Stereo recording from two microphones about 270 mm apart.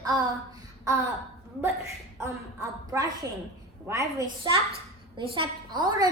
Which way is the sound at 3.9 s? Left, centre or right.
Centre.